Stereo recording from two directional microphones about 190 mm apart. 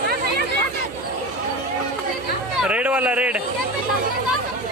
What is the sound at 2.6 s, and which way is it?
Speech, 5° right (ahead or behind).